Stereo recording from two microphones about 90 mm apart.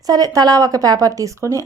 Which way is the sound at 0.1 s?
45° right (ahead or behind).